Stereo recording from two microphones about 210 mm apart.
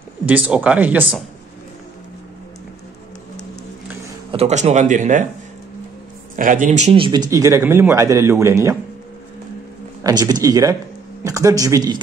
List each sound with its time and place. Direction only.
0.3 s speech: 5° right (ahead or behind)
4.3 s speech: 30° right (ahead or behind)
6.3 s speech: 40° right (ahead or behind); by 8.5 s 15° right (ahead or behind)
10.0 s speech: 20° right (ahead or behind)